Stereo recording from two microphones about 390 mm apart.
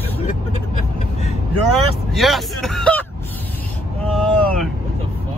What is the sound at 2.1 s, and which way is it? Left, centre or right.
Speech, centre.